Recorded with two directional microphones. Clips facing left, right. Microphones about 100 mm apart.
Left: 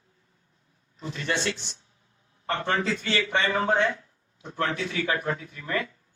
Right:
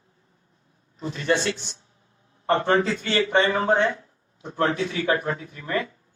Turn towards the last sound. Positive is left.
turn(degrees=-35)  # may be behind; listen again after turning